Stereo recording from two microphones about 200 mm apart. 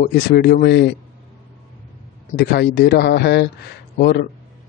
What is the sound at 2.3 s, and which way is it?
Speech, 55° left (ahead or behind).